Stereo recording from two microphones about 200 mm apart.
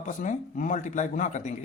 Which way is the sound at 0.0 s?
40° left (ahead or behind).